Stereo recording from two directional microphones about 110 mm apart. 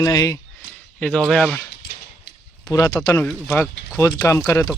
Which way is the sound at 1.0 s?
10° left (ahead or behind).